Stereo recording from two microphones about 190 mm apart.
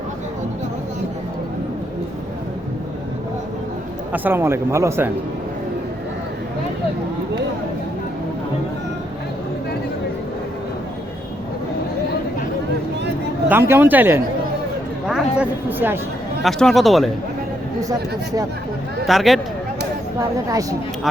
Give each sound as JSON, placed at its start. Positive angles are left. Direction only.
{"t": 4.1, "sound": "speech", "side_deg": -10}
{"t": 13.5, "sound": "speech", "side_deg": -10}
{"t": 16.4, "sound": "speech", "side_deg": 0}
{"t": 19.0, "sound": "speech", "side_deg": 0}
{"t": 20.1, "sound": "speech", "side_deg": -20}